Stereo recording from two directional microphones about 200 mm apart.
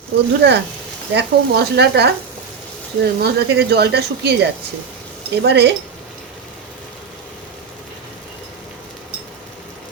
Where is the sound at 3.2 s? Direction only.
55° right (ahead or behind).